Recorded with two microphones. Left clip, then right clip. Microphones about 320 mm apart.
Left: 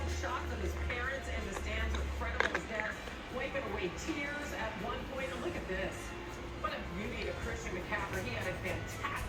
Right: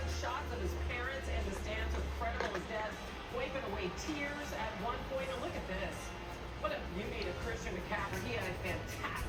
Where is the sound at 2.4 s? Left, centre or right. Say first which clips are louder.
Left 8 dB; left.